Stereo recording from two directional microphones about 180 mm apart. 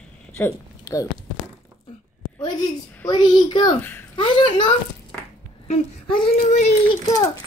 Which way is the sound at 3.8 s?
10° left (ahead or behind).